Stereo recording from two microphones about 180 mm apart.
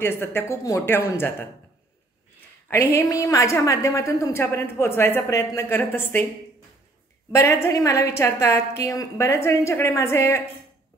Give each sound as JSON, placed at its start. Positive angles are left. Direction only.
{"t": 0.0, "sound": "a woman's voice", "side_deg": 10}
{"t": 2.7, "sound": "a woman's voice", "side_deg": 15}
{"t": 7.3, "sound": "a woman's voice", "side_deg": 15}